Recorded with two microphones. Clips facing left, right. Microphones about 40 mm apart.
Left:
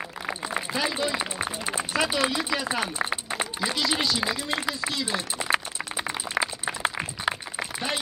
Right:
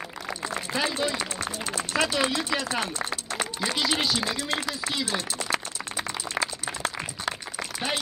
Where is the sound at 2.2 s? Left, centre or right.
Centre.